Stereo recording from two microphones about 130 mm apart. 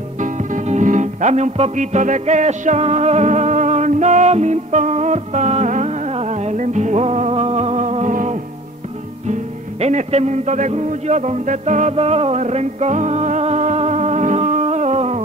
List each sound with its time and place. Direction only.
0.2 s music: 75° right (ahead or behind)
9.3 s a man's voice: 60° right (ahead or behind)